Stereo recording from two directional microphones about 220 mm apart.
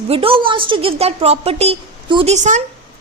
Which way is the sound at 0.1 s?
25° right (ahead or behind).